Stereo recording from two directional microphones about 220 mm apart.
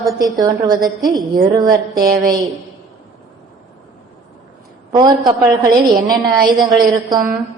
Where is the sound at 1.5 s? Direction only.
15° right (ahead or behind).